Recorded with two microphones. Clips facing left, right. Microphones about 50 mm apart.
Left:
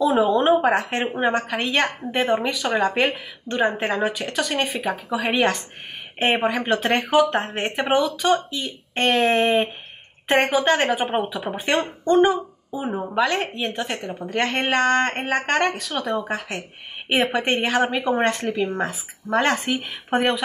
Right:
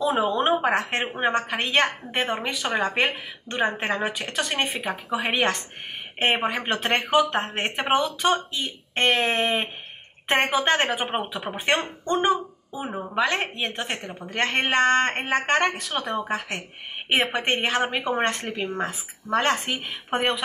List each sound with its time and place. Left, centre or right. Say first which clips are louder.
0.0 s a woman's voice: left 4 dB; right
11.4 s speech: left 2 dB; right
12.8 s speech: left 5 dB; centre
13.1 s a woman's voice: left 1 dB; right